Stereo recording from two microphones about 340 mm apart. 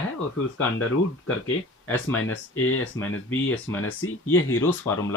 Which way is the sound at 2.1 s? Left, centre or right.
Left.